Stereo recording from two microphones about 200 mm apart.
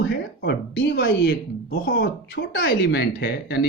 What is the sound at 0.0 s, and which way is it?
Speech, 60° left (ahead or behind).